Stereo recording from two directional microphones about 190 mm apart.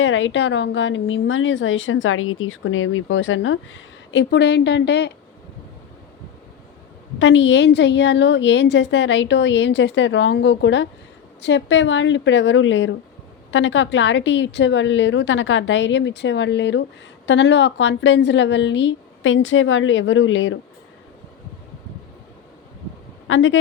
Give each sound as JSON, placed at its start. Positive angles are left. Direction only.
{"t": 0.0, "sound": "a woman's voice", "side_deg": 90}
{"t": 7.2, "sound": "a woman's voice", "side_deg": 75}
{"t": 23.2, "sound": "speech", "side_deg": 80}